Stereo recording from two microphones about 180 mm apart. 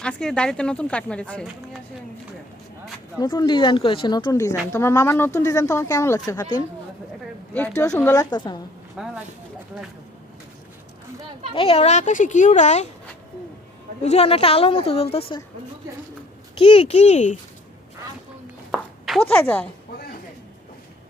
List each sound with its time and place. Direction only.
0.0 s a woman's voice: 5° left (ahead or behind)
3.2 s a woman's voice: 25° left (ahead or behind)
7.9 s a woman's voice: 15° left (ahead or behind)
9.0 s a woman's voice: 5° right (ahead or behind)
11.5 s a child's voice: 30° left (ahead or behind)
14.0 s a child's voice: 35° left (ahead or behind)
16.6 s a child's voice: 30° left (ahead or behind)
18.7 s a sound: centre (ahead or behind)